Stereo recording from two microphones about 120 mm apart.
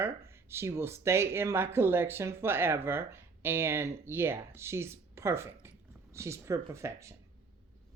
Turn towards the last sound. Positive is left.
turn(degrees=-25)  # may be behind; listen again after turning